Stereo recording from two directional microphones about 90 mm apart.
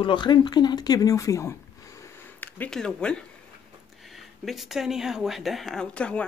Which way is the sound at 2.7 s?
10° left (ahead or behind).